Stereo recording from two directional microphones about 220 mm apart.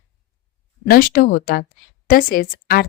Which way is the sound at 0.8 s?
40° left (ahead or behind).